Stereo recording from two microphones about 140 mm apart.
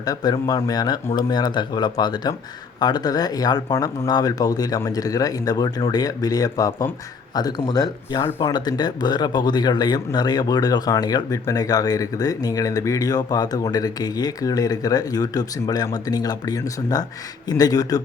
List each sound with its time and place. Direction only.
0.0 s speech: 30° left (ahead or behind)